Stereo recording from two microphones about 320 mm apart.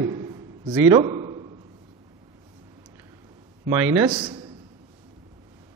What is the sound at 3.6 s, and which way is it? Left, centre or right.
Speech, centre.